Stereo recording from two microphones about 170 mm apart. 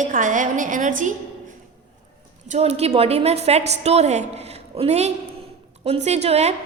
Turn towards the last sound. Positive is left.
turn(degrees=-40)  # may be behind; listen again after turning